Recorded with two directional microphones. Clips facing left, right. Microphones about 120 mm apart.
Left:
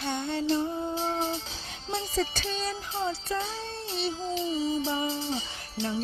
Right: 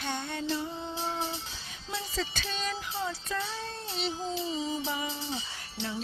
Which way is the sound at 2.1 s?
40° left (ahead or behind).